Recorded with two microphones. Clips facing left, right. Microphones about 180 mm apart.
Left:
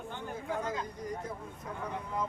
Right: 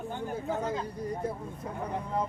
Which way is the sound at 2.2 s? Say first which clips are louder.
Right 4 dB; 35° right (ahead or behind).